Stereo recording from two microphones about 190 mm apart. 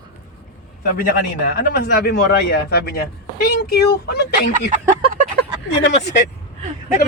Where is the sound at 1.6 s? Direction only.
55° left (ahead or behind).